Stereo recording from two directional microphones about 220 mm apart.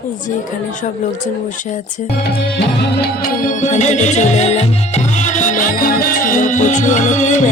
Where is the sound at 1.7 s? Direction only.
35° left (ahead or behind).